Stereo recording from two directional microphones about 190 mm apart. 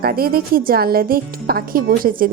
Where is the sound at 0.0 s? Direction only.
50° right (ahead or behind).